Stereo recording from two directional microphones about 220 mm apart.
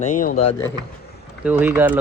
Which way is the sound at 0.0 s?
35° left (ahead or behind).